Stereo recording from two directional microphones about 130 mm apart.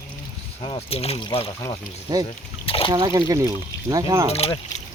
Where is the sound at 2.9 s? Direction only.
30° right (ahead or behind).